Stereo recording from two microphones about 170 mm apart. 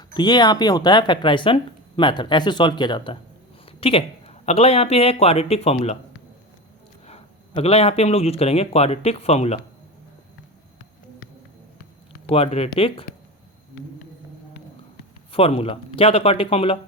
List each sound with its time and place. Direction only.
0.1 s speech: 25° left (ahead or behind)
7.1 s a man's voice: 35° left (ahead or behind)
12.3 s a man's voice: 35° left (ahead or behind)
15.3 s a man's voice: 35° left (ahead or behind)